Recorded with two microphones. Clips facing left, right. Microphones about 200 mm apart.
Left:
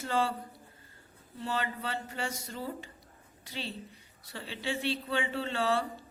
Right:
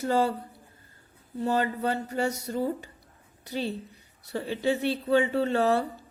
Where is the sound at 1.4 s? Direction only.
40° right (ahead or behind).